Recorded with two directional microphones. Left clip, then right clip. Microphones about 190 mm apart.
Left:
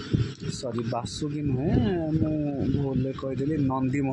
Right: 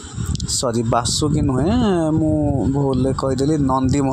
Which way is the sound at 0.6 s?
35° right (ahead or behind).